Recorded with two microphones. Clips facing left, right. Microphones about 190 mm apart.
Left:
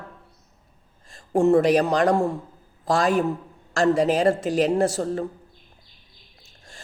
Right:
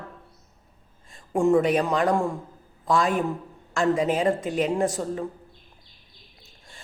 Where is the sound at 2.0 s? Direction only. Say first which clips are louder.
Left 3 dB; 40° left (ahead or behind).